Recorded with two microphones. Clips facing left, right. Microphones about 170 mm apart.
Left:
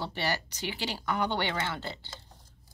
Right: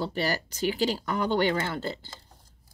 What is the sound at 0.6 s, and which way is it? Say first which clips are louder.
Speech: right 7 dB; 40° right (ahead or behind).